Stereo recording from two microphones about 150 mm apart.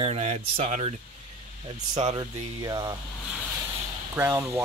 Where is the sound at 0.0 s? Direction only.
45° right (ahead or behind).